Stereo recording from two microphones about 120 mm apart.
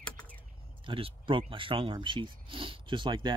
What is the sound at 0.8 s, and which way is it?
Speech, 45° right (ahead or behind).